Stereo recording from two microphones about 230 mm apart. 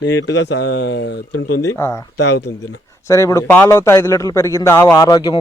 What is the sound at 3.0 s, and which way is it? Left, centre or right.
Speech, centre.